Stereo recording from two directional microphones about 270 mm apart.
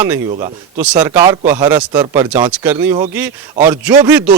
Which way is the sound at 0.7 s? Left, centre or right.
Centre.